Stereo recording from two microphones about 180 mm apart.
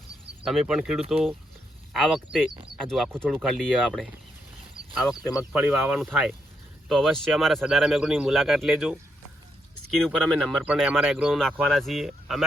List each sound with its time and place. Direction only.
0.4 s speech: centre (ahead or behind)
5.5 s speech: centre (ahead or behind)